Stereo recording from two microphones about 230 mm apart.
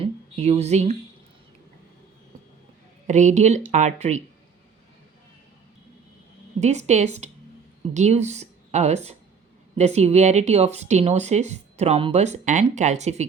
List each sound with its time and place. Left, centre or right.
0.0 s a sound: right
3.1 s speech: right
6.6 s speech: right